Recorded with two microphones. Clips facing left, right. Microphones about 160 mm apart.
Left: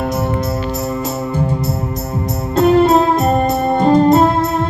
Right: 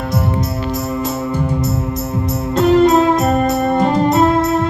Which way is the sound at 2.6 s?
35° left (ahead or behind).